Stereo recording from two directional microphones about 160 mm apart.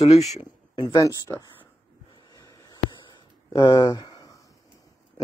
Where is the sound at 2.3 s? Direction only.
25° left (ahead or behind).